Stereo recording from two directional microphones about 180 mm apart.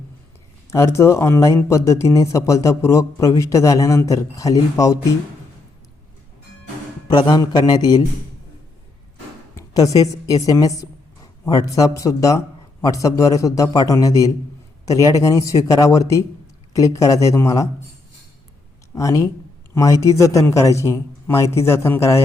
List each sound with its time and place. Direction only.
0.7 s speech: 15° left (ahead or behind)
7.1 s speech: 25° left (ahead or behind)
9.6 s a woman's voice: 20° left (ahead or behind)
18.9 s speech: 20° left (ahead or behind)